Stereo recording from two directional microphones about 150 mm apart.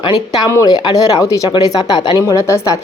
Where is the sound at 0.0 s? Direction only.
25° left (ahead or behind).